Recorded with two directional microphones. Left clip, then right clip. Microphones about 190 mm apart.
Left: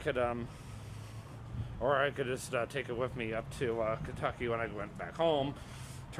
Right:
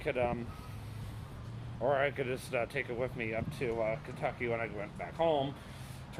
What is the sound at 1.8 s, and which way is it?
Speech, 15° left (ahead or behind).